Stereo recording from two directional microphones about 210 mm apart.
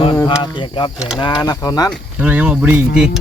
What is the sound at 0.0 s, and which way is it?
Speech, 20° left (ahead or behind).